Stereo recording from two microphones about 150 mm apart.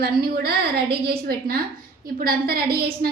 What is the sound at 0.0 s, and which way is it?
A woman's voice, 90° right.